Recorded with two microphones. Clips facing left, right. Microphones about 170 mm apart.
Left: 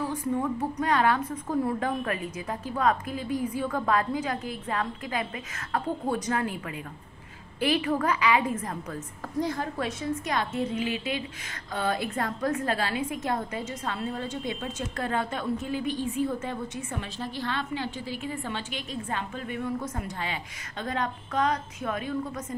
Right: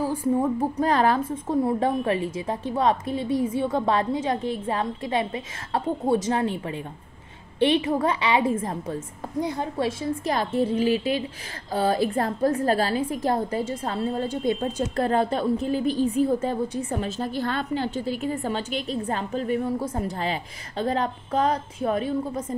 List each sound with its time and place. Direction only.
0.0 s a woman's voice: 30° right (ahead or behind)